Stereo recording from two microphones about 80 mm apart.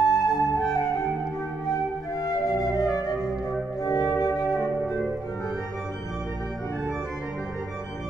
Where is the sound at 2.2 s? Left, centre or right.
Left.